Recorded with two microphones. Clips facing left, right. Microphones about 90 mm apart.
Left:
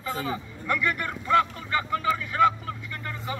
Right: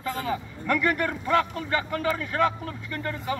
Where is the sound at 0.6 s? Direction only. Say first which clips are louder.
Right 3 dB; 45° right (ahead or behind).